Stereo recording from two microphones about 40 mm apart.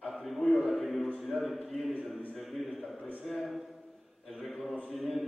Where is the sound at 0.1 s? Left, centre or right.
Centre.